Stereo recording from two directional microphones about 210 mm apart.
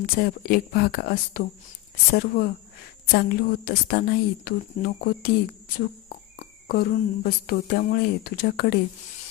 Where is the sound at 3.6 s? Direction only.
45° left (ahead or behind).